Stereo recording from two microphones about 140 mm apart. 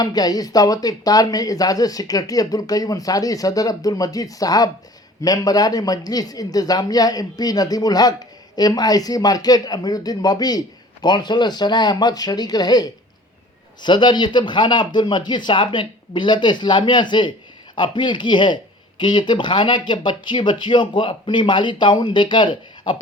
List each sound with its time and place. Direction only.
0.0 s speech: 25° left (ahead or behind)